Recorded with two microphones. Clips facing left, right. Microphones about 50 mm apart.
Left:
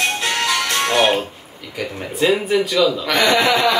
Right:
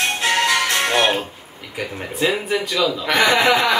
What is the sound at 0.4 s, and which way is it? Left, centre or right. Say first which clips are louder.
Music: right 1 dB; right.